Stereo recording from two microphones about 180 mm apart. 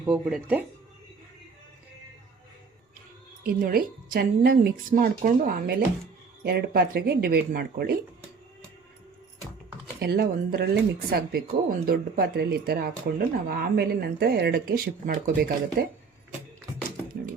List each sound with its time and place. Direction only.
0.1 s speech: 5° right (ahead or behind)
3.4 s a woman's voice: 55° right (ahead or behind)
10.0 s speech: 60° right (ahead or behind)